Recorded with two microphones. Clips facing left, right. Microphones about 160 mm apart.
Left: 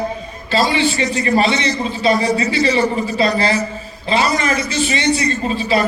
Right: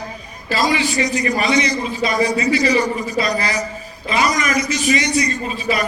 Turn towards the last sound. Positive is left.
turn(degrees=30)  # may be behind; listen again after turning